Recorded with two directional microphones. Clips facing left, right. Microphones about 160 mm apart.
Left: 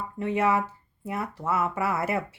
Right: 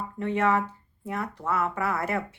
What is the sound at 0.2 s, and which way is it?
Speech, 10° left (ahead or behind).